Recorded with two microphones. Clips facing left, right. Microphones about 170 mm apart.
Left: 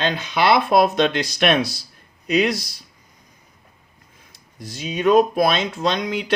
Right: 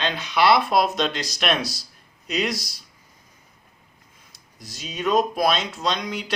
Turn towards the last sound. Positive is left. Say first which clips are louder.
# left 4 dB
turn(degrees=55)  # may be behind; listen again after turning